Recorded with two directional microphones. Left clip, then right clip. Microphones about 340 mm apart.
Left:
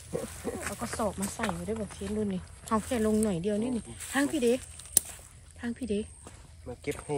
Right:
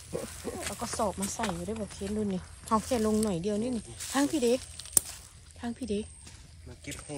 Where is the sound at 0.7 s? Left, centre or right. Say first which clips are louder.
Right 2 dB; centre.